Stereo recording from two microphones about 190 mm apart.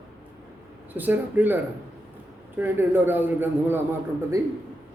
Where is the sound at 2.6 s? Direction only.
10° right (ahead or behind).